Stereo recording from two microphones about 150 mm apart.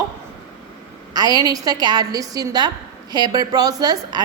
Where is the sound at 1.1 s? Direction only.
25° right (ahead or behind).